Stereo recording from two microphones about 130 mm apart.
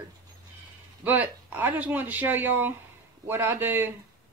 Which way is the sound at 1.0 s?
15° right (ahead or behind).